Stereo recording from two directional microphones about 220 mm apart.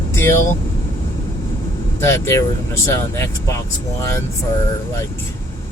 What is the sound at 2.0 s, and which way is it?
Speech, 10° left (ahead or behind).